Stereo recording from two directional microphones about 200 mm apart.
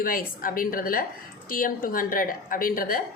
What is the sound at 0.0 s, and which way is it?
A woman's voice, 45° left (ahead or behind).